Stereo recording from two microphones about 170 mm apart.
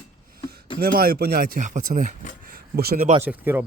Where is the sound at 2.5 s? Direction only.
60° right (ahead or behind).